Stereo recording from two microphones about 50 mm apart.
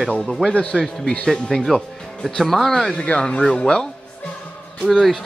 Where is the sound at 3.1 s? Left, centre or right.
Left.